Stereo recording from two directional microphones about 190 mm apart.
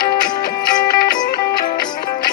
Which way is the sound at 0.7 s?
20° left (ahead or behind).